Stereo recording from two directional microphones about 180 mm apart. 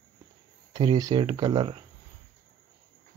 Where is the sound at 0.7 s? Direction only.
20° right (ahead or behind).